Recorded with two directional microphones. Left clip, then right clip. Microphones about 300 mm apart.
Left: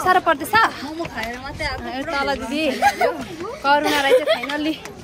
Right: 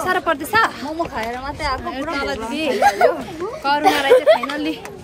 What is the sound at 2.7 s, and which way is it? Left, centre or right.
Speech, right.